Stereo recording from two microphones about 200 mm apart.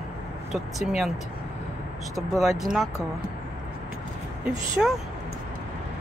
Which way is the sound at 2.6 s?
Centre (ahead or behind).